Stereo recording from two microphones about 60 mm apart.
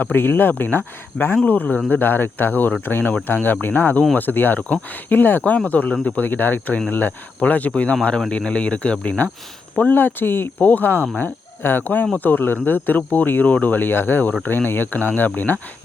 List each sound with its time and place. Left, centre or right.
0.0 s speech: left
1.5 s speech: left